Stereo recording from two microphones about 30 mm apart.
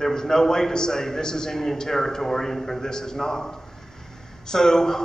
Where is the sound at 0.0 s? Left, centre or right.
Centre.